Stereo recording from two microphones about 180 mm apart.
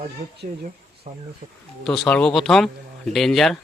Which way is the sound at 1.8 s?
5° left (ahead or behind).